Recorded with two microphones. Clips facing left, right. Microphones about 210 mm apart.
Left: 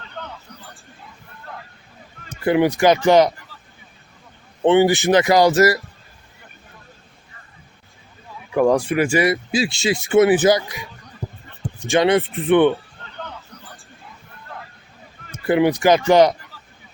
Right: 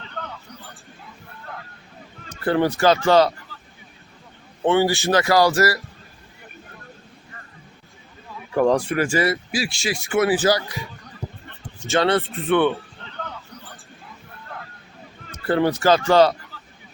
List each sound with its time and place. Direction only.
2.4 s speech: 15° left (ahead or behind)
4.6 s speech: 20° left (ahead or behind)
8.5 s speech: 10° left (ahead or behind)
11.9 s speech: 15° left (ahead or behind)
15.4 s speech: 15° left (ahead or behind)